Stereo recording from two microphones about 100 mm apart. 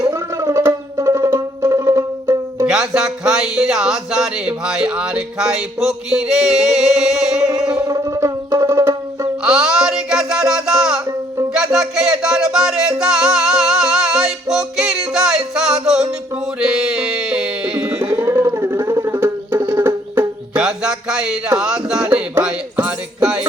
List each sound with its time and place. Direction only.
0.1 s music: 30° right (ahead or behind)
2.6 s speech: 5° right (ahead or behind)
7.9 s music: 35° right (ahead or behind)
9.4 s music: 5° right (ahead or behind)
18.1 s music: 25° right (ahead or behind)
20.6 s a sound: 5° right (ahead or behind)
22.1 s music: 15° right (ahead or behind)